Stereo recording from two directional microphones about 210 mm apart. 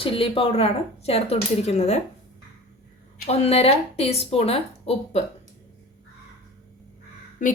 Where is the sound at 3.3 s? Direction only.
30° left (ahead or behind).